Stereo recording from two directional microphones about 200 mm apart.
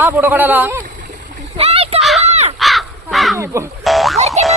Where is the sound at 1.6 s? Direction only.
30° right (ahead or behind).